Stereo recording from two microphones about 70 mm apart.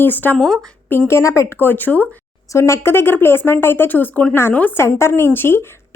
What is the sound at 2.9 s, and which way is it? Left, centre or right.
A woman's voice, left.